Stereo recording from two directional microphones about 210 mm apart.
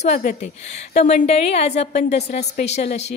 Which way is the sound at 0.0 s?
35° left (ahead or behind).